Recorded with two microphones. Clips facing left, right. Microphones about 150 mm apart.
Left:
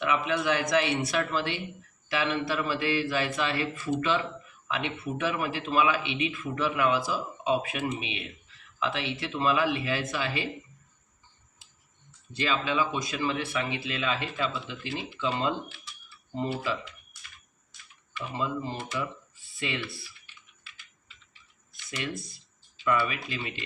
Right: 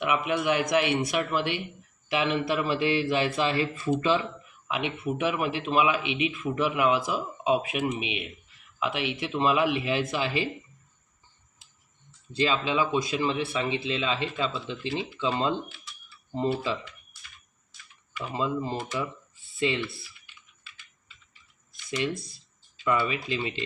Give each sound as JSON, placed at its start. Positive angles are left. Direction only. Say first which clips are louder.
{"t": 0.0, "sound": "speech", "louder": "right 1 dB", "side_deg": -15}
{"t": 12.4, "sound": "speech", "louder": "right 2 dB", "side_deg": -25}
{"t": 18.3, "sound": "speech", "louder": "right 3 dB", "side_deg": -20}
{"t": 21.8, "sound": "speech", "louder": "right 5 dB", "side_deg": -25}